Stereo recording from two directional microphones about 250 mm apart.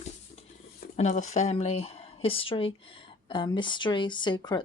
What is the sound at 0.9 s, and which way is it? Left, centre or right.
Speech, left.